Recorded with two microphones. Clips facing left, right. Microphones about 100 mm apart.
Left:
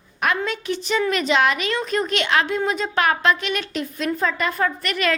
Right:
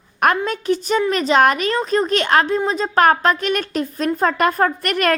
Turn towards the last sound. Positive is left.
turn(degrees=-50)  # may be behind; listen again after turning